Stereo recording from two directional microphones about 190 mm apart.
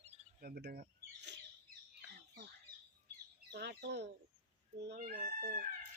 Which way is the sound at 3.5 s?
60° right (ahead or behind).